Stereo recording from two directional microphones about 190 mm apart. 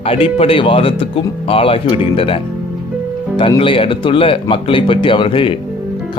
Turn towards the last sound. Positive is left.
turn(degrees=25)  # may be behind; listen again after turning